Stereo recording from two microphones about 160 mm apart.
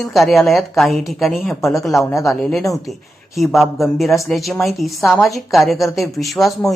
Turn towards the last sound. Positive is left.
turn(degrees=0)  # may be behind; listen again after turning